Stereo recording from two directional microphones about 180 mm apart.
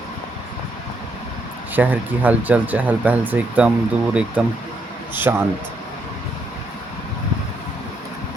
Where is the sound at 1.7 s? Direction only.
10° right (ahead or behind).